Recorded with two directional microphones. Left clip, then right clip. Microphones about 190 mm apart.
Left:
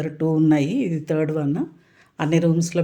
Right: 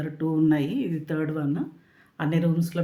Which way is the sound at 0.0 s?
40° left (ahead or behind).